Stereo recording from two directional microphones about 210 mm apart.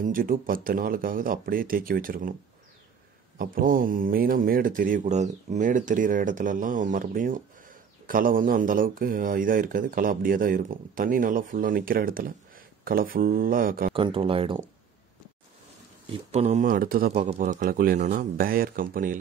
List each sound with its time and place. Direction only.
0.0 s speech: 40° right (ahead or behind)
3.3 s speech: 40° right (ahead or behind)
13.9 s speech: 25° right (ahead or behind)
16.1 s speech: 30° right (ahead or behind)